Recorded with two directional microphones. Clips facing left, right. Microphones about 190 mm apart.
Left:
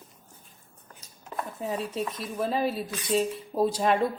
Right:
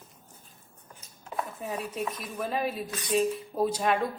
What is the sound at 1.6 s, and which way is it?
Speech, 30° left (ahead or behind).